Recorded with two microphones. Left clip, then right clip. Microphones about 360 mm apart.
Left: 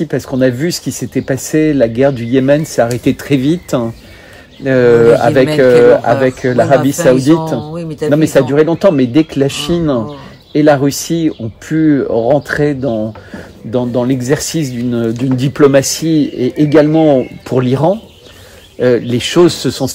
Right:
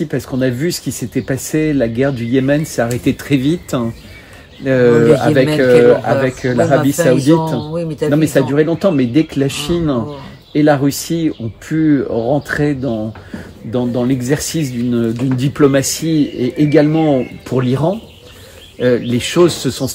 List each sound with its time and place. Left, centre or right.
0.1 s speech: left
7.0 s speech: centre
8.1 s speech: left